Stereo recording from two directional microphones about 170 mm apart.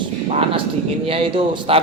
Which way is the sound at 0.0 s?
30° right (ahead or behind).